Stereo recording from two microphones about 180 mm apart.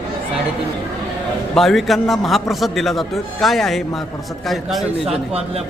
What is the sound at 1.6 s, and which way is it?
A man's voice, centre (ahead or behind).